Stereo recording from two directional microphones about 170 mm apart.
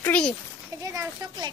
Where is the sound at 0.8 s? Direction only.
20° right (ahead or behind).